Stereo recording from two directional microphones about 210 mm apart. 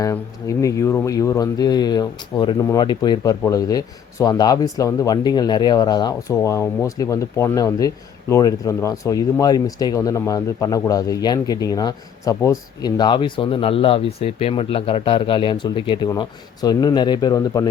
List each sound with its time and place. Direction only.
0.0 s speech: 15° left (ahead or behind)